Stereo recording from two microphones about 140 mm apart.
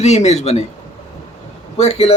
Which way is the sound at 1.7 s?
50° left (ahead or behind).